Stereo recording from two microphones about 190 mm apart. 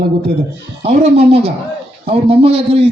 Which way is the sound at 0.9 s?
30° right (ahead or behind).